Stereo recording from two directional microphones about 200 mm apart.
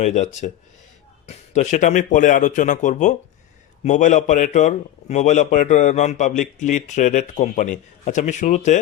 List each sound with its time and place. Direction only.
0.0 s a man's voice: 35° left (ahead or behind)